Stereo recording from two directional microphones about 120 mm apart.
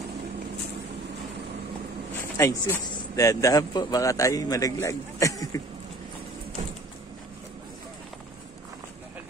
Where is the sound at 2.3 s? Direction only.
25° left (ahead or behind).